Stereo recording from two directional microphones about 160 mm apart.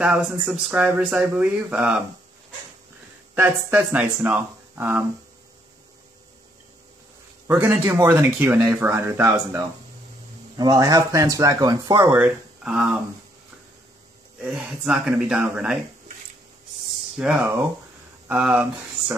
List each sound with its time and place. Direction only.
0.0 s speech: 5° right (ahead or behind)
3.3 s speech: 15° right (ahead or behind)
7.4 s speech: 10° right (ahead or behind)
14.4 s speech: 10° right (ahead or behind)
17.2 s speech: 5° right (ahead or behind)
18.3 s a sound: 10° right (ahead or behind)